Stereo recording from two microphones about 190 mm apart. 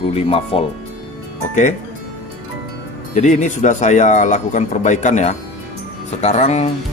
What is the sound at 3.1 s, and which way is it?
Speech, 40° left (ahead or behind).